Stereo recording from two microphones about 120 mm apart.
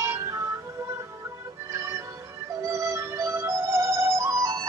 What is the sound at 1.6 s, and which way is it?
Music, 25° right (ahead or behind).